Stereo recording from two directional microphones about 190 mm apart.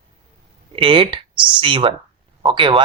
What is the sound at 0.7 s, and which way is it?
Speech, 30° right (ahead or behind).